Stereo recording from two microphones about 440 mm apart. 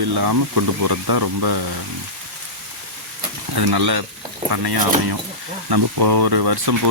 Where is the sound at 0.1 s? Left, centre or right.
Right.